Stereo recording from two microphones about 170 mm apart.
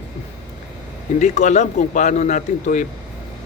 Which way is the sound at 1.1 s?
45° left (ahead or behind).